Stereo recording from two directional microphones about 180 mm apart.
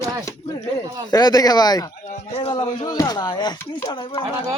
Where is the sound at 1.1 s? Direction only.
20° left (ahead or behind).